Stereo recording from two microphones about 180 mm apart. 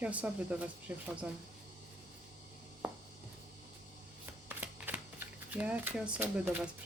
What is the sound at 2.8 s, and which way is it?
Chopping, 5° right (ahead or behind).